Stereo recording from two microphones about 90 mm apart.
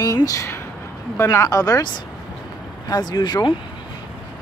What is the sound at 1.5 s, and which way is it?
Speech, 40° left (ahead or behind).